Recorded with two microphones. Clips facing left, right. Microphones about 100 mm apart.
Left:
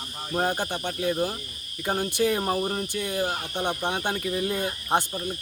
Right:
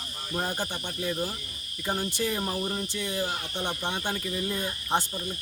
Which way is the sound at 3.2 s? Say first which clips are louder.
Left 4 dB; 50° left (ahead or behind).